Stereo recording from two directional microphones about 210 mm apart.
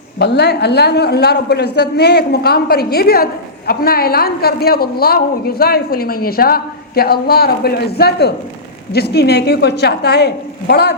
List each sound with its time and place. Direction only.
0.2 s a woman's voice: 50° left (ahead or behind)